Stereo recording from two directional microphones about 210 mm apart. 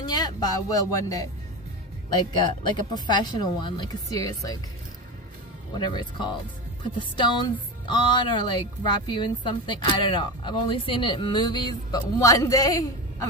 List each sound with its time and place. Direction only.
0.0 s speech: 20° left (ahead or behind)
2.3 s speech: 20° left (ahead or behind)
5.8 s speech: 20° left (ahead or behind)